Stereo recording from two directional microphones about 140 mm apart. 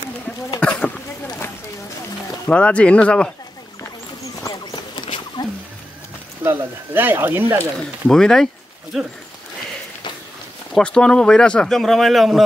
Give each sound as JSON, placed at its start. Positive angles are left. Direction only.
{"t": 0.6, "sound": "a sound", "side_deg": 10}
{"t": 2.4, "sound": "speech", "side_deg": 10}
{"t": 4.4, "sound": "a sound", "side_deg": 30}
{"t": 6.4, "sound": "speech", "side_deg": -15}
{"t": 8.1, "sound": "speech", "side_deg": 5}
{"t": 10.7, "sound": "speech", "side_deg": 5}